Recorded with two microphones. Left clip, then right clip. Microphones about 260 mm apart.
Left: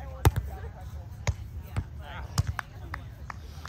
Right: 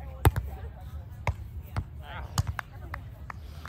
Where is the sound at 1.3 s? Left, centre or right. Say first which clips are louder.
Right 2 dB; right.